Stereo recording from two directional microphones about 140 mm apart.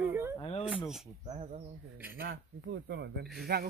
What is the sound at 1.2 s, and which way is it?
Speech, 50° right (ahead or behind).